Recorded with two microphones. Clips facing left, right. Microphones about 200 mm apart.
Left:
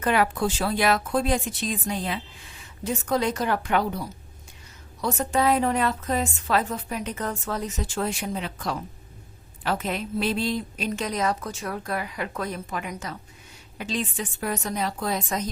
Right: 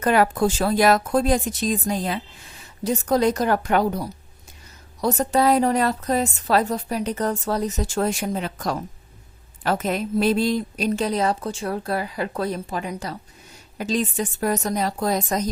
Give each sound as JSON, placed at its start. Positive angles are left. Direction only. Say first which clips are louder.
{"t": 0.0, "sound": "a woman's voice", "louder": "right 4 dB", "side_deg": -40}